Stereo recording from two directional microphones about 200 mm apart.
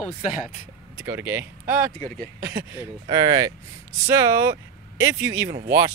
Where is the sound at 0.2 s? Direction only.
40° left (ahead or behind).